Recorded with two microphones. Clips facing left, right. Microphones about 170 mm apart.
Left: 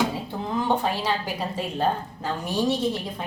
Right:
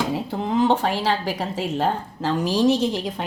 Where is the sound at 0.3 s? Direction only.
85° right.